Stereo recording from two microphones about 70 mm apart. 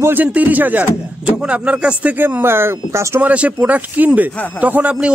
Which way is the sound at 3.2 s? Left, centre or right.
Right.